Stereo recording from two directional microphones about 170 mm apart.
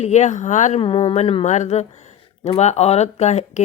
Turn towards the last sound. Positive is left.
turn(degrees=40)  # may be behind; listen again after turning